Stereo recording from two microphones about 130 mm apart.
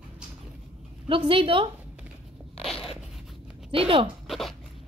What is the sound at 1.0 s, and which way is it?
Speech, 40° right (ahead or behind).